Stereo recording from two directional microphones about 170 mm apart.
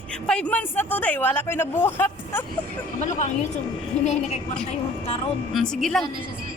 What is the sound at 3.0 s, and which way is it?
A woman's voice, 45° left (ahead or behind).